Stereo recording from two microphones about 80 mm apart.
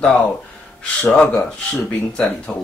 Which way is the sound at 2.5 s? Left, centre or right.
Centre.